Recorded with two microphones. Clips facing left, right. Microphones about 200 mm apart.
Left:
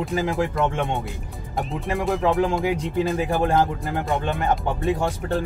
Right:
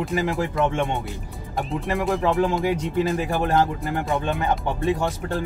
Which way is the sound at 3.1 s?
20° left (ahead or behind).